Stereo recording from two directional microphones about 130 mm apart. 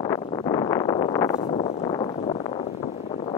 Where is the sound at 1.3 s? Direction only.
45° left (ahead or behind).